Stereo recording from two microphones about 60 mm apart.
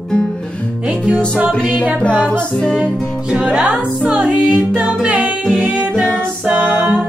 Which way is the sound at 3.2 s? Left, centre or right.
Centre.